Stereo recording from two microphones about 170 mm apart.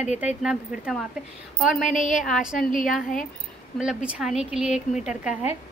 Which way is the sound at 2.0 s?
45° left (ahead or behind).